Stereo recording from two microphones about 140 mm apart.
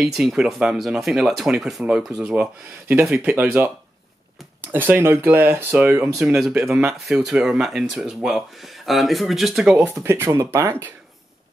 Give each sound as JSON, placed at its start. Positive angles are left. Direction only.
{"t": 0.0, "sound": "speech", "side_deg": -5}
{"t": 4.7, "sound": "speech", "side_deg": -15}
{"t": 6.1, "sound": "speech", "side_deg": -5}
{"t": 10.0, "sound": "speech", "side_deg": -20}